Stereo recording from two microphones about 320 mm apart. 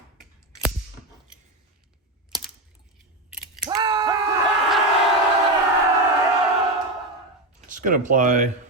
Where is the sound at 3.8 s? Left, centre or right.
Centre.